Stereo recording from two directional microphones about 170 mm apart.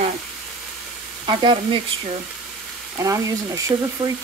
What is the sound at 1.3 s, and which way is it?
Speech, 30° right (ahead or behind).